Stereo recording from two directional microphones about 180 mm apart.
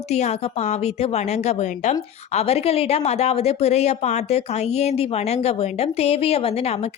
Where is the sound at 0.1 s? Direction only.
40° left (ahead or behind).